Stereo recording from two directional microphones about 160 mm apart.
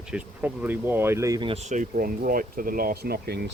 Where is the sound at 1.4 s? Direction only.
40° right (ahead or behind).